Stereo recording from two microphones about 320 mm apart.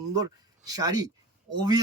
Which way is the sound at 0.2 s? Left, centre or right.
Centre.